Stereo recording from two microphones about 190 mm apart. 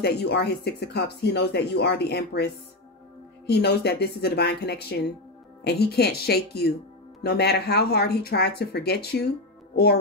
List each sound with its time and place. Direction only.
0.0 s speech: 60° left (ahead or behind)